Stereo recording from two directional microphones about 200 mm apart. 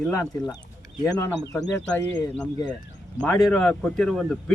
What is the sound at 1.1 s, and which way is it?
Speech, 15° left (ahead or behind).